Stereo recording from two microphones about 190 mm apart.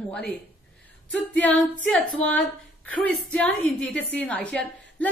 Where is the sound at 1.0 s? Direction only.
5° left (ahead or behind).